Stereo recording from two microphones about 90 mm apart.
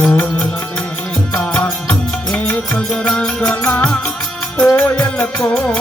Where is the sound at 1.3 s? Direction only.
15° left (ahead or behind).